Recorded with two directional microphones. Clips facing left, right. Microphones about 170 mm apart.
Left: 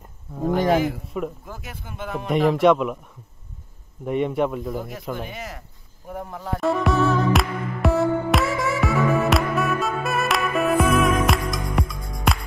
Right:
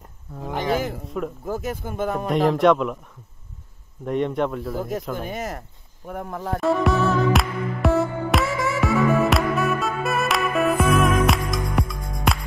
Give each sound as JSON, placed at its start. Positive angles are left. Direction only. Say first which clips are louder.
{"t": 0.4, "sound": "a sound", "louder": "left 5 dB", "side_deg": 45}
{"t": 1.4, "sound": "speech", "louder": "right 11 dB", "side_deg": -40}
{"t": 2.2, "sound": "speech", "louder": "left 1 dB", "side_deg": 0}
{"t": 4.0, "sound": "speech", "louder": "left 1 dB", "side_deg": 5}
{"t": 5.1, "sound": "speech", "louder": "right 3 dB", "side_deg": -45}
{"t": 6.0, "sound": "speech", "louder": "right 2 dB", "side_deg": -55}
{"t": 6.6, "sound": "music", "louder": "even", "side_deg": 0}